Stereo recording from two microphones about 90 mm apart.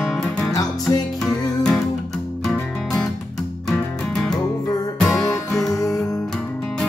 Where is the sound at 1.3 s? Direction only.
10° left (ahead or behind).